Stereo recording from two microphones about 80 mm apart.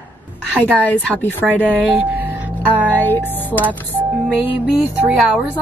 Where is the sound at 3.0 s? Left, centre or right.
Left.